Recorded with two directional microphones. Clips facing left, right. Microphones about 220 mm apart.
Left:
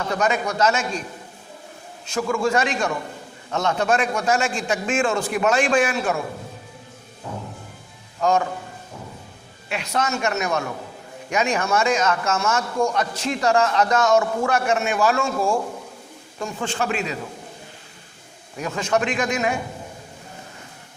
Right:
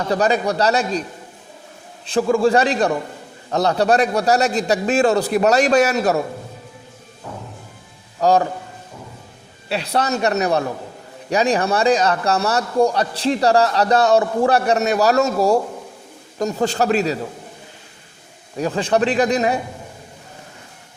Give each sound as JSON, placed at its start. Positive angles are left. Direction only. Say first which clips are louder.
{"t": 0.1, "sound": "a man's voice", "louder": "right 5 dB", "side_deg": -35}
{"t": 2.0, "sound": "a man's voice", "louder": "right 6 dB", "side_deg": -30}
{"t": 8.2, "sound": "a man's voice", "louder": "right 4 dB", "side_deg": -35}
{"t": 9.6, "sound": "a man's voice", "louder": "right 4 dB", "side_deg": -35}
{"t": 18.5, "sound": "a man's voice", "louder": "right 4 dB", "side_deg": -35}